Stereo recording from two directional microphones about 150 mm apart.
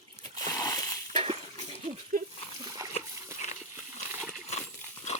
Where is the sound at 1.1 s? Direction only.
40° right (ahead or behind).